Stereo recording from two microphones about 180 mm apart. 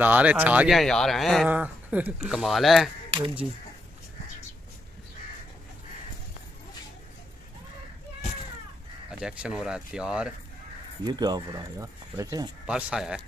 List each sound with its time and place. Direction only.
0.0 s speech: 10° right (ahead or behind)
3.1 s speech: 30° right (ahead or behind)
9.2 s speech: 5° right (ahead or behind)
11.1 s speech: 25° right (ahead or behind)
12.6 s speech: 5° right (ahead or behind)